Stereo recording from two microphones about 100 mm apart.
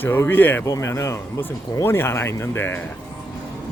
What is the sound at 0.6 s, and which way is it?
Speech, 30° left (ahead or behind).